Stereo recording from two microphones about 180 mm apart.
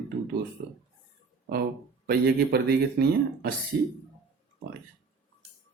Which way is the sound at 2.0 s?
65° right (ahead or behind).